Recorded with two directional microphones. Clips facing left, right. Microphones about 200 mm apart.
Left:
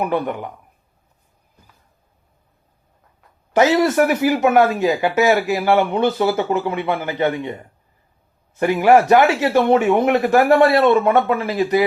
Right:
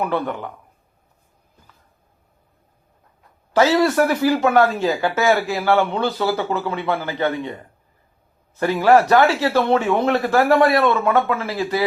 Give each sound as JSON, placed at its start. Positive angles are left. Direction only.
{"t": 0.0, "sound": "a man's voice", "side_deg": 20}
{"t": 3.5, "sound": "speech", "side_deg": 20}
{"t": 8.5, "sound": "speech", "side_deg": 15}